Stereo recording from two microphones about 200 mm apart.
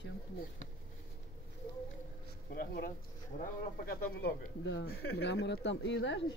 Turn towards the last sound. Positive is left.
turn(degrees=65)  # may be behind; listen again after turning